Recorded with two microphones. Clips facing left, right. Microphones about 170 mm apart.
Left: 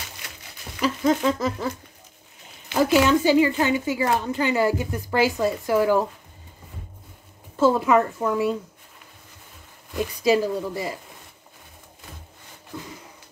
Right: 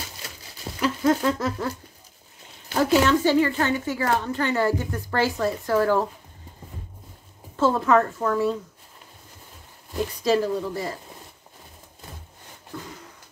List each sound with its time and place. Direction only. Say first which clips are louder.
0.7 s speech: even; centre (ahead or behind)
2.7 s a woman's voice: left 1 dB; 10° left (ahead or behind)
7.5 s a woman's voice: left 1 dB; 10° left (ahead or behind)
9.9 s a woman's voice: left 1 dB; 10° left (ahead or behind)
12.7 s a sound: even; 20° left (ahead or behind)